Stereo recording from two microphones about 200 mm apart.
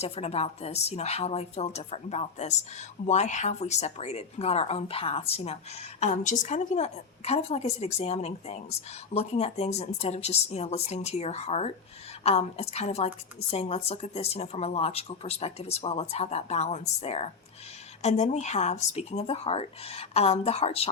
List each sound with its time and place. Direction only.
0.0 s speech: 30° left (ahead or behind)